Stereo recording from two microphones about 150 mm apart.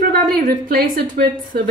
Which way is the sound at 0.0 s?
65° right (ahead or behind).